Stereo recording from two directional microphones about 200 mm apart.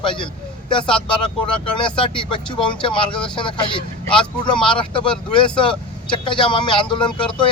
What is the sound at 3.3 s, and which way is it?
Speech, 25° left (ahead or behind).